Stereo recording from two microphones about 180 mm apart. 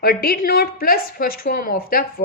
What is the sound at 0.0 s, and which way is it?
A woman's voice, 55° left (ahead or behind).